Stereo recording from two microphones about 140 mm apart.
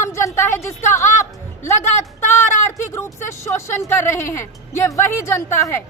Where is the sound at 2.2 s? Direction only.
15° left (ahead or behind).